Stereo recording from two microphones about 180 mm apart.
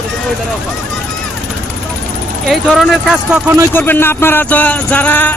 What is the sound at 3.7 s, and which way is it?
Music, 10° left (ahead or behind).